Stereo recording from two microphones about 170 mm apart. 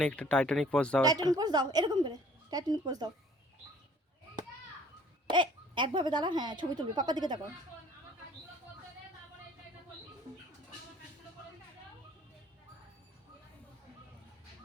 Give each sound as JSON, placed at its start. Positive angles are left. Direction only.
{"t": 0.0, "sound": "speech", "side_deg": 5}
{"t": 1.0, "sound": "a woman's voice", "side_deg": -20}
{"t": 5.3, "sound": "a woman's voice", "side_deg": -30}